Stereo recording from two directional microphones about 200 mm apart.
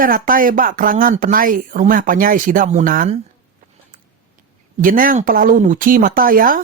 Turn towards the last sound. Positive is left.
turn(degrees=-45)  # may be behind; listen again after turning